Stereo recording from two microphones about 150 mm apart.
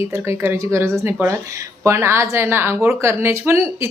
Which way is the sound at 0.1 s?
15° right (ahead or behind).